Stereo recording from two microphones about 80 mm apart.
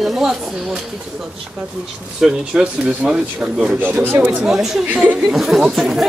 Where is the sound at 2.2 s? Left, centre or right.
Centre.